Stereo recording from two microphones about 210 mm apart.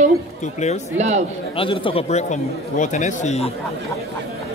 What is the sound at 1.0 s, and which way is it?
Speech, 35° right (ahead or behind).